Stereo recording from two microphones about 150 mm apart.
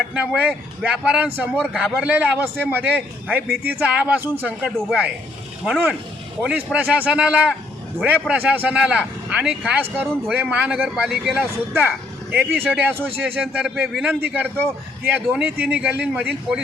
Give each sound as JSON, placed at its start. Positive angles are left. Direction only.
{"t": 0.0, "sound": "a sound", "side_deg": -10}
{"t": 0.3, "sound": "a man's voice", "side_deg": -5}
{"t": 6.4, "sound": "a man's voice", "side_deg": -10}